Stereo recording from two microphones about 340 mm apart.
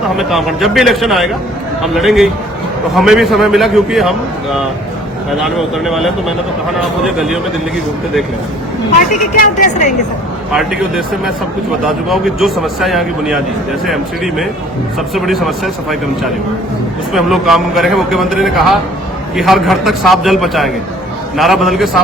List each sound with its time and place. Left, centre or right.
0.2 s a man's voice: centre
5.4 s a man's voice: centre
9.0 s a woman's voice: left
10.5 s a man's voice: centre